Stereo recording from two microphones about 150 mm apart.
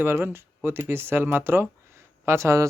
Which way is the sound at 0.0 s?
15° right (ahead or behind).